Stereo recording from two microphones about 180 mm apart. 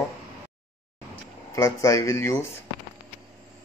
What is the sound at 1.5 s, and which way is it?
Speech, 15° left (ahead or behind).